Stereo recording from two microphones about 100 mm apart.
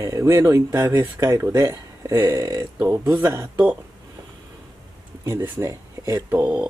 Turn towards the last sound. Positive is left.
turn(degrees=-15)  # may be behind; listen again after turning